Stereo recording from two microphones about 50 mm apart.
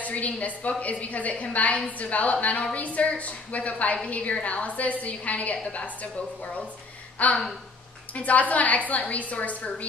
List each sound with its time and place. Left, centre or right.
0.0 s a woman's voice: left
7.2 s a woman's voice: left